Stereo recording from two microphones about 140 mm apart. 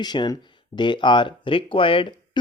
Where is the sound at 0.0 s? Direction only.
30° left (ahead or behind).